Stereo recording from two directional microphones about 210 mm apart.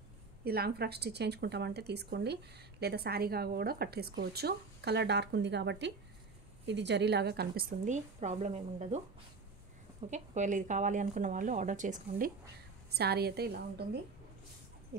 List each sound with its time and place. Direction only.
0.4 s a woman's voice: 50° right (ahead or behind); by 9.0 s 30° right (ahead or behind)
10.0 s a woman's voice: 35° right (ahead or behind)
12.9 s speech: 50° right (ahead or behind)